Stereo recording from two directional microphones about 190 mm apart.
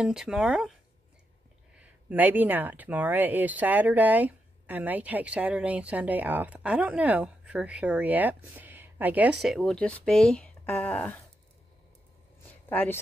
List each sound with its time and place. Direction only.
0.0 s speech: centre (ahead or behind)
1.8 s speech: 10° right (ahead or behind); by 11.1 s 10° left (ahead or behind)
12.6 s speech: 10° left (ahead or behind)